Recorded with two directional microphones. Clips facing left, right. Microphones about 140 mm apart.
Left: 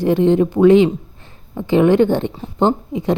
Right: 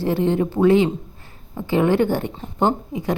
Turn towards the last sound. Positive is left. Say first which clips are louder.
# left 4 dB
turn(degrees=25)  # may be behind; listen again after turning